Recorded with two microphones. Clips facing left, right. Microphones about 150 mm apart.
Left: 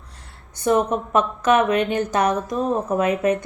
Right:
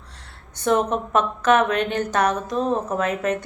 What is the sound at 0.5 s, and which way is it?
Speech, 10° left (ahead or behind).